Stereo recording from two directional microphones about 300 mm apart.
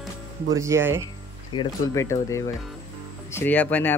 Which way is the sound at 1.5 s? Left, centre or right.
Centre.